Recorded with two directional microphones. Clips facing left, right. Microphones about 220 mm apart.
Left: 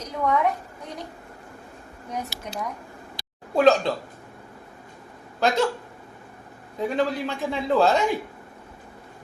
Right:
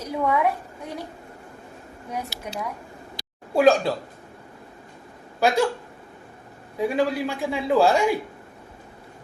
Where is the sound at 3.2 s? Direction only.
55° left (ahead or behind).